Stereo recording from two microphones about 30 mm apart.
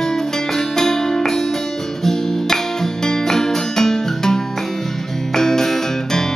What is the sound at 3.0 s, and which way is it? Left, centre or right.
Music, centre.